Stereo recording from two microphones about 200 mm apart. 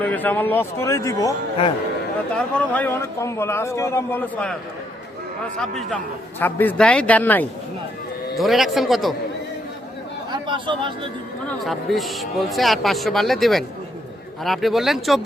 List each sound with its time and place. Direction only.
0.0 s speech: 10° left (ahead or behind)
2.3 s speech: 5° left (ahead or behind)
5.5 s a man's voice: 5° left (ahead or behind)
10.3 s speech: 25° right (ahead or behind)
11.4 s a man's voice: centre (ahead or behind)